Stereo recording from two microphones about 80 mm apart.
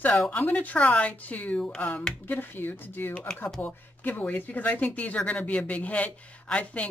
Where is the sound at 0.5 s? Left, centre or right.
Centre.